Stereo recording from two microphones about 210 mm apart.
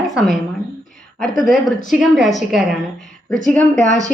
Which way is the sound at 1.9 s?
Centre (ahead or behind).